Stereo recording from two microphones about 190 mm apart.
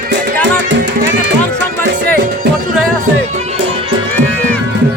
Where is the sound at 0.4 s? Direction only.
70° right (ahead or behind).